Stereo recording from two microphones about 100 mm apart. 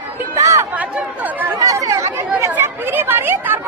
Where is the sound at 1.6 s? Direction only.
35° right (ahead or behind).